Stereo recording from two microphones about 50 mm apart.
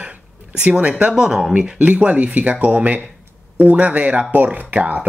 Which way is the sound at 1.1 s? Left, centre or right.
Centre.